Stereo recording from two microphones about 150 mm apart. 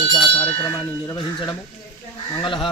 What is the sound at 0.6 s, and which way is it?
Speech, 25° left (ahead or behind).